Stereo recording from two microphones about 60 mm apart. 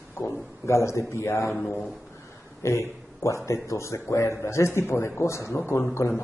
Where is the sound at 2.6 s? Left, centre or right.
Left.